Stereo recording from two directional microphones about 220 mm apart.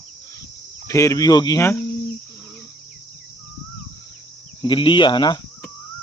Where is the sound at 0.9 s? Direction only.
15° left (ahead or behind).